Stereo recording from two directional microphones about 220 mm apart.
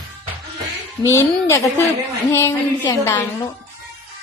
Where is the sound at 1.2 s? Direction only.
15° left (ahead or behind).